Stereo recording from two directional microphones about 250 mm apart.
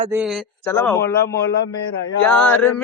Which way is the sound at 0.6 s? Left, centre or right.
Centre.